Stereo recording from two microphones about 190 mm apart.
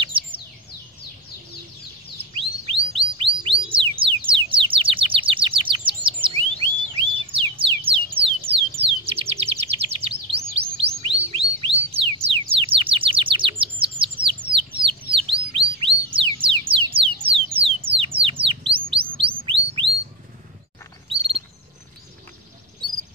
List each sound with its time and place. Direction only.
0.0 s bird: 30° right (ahead or behind)
2.3 s chirp: 30° right (ahead or behind)
3.7 s bird: 25° right (ahead or behind)
16.1 s a sound: 25° right (ahead or behind)
18.9 s chirp: 30° right (ahead or behind)